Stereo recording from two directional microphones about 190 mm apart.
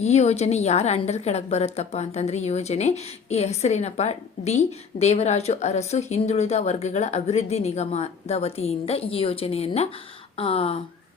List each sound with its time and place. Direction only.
0.0 s a woman's voice: 35° left (ahead or behind)